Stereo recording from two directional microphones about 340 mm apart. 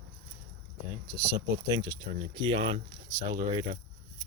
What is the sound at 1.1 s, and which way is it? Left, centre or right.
Speech, centre.